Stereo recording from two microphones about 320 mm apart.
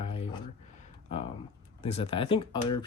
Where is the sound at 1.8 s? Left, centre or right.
Centre.